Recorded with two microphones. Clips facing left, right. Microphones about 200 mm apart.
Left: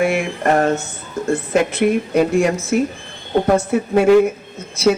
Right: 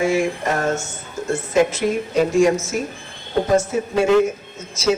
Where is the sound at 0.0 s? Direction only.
60° left (ahead or behind).